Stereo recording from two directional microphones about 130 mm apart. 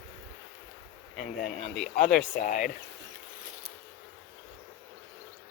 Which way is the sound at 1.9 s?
80° left.